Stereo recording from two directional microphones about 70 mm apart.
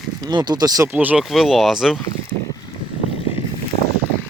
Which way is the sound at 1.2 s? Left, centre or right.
Centre.